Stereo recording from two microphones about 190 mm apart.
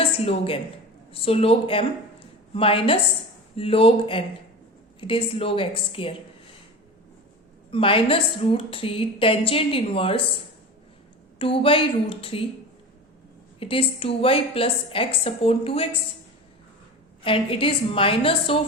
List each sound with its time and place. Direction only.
0.0 s a woman's voice: 30° left (ahead or behind)
7.7 s a woman's voice: 30° left (ahead or behind)
11.3 s a woman's voice: 30° left (ahead or behind)
13.6 s a woman's voice: 30° left (ahead or behind)
17.2 s a woman's voice: 30° left (ahead or behind)